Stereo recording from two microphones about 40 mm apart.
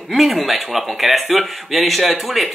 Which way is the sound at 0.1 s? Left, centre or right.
Centre.